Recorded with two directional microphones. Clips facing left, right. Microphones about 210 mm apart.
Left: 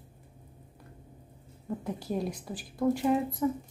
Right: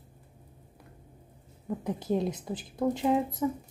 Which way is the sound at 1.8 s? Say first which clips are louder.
Right 4 dB; 20° right (ahead or behind).